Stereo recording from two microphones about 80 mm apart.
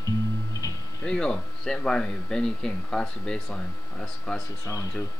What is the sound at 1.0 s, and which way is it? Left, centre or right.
Speech, centre.